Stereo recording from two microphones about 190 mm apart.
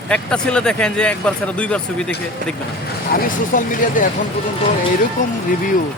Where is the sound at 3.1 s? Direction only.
50° left (ahead or behind).